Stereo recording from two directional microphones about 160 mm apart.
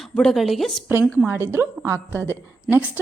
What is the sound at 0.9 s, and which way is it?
A woman's voice, 10° right (ahead or behind).